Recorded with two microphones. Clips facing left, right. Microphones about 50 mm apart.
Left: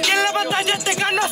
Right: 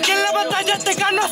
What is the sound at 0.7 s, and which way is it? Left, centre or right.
Speech, centre.